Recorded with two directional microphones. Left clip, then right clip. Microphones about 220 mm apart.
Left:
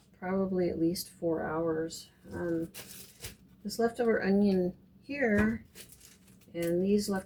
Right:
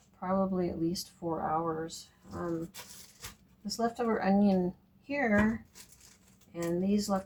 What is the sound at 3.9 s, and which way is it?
Speech, 20° right (ahead or behind).